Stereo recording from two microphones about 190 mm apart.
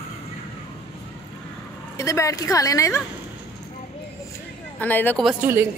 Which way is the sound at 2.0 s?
15° left (ahead or behind).